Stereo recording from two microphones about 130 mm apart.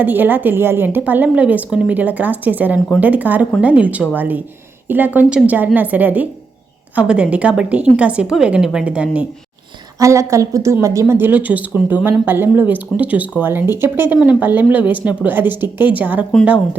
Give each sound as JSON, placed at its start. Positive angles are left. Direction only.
{"t": 0.0, "sound": "a woman's voice", "side_deg": -15}
{"t": 10.0, "sound": "a woman's voice", "side_deg": -25}